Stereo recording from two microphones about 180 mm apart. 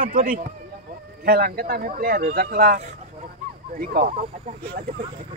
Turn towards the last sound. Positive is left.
turn(degrees=-60)  # may be behind; listen again after turning